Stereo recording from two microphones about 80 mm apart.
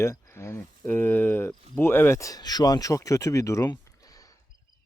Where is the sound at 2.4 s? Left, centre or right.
Left.